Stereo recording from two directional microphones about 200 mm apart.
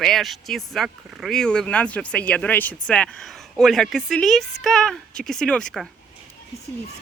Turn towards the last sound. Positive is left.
turn(degrees=5)  # may be behind; listen again after turning